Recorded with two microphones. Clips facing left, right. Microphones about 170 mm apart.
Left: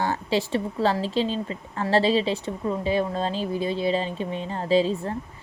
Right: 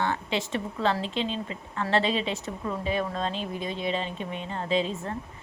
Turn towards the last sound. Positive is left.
turn(degrees=35)  # may be behind; listen again after turning